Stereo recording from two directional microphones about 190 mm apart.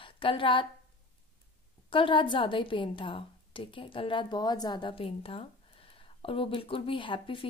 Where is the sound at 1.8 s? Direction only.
25° left (ahead or behind).